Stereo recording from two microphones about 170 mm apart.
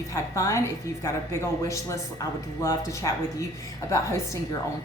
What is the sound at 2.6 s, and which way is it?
Speech, 20° left (ahead or behind).